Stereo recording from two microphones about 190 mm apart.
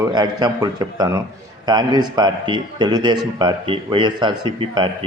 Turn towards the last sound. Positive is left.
turn(degrees=-25)  # may be behind; listen again after turning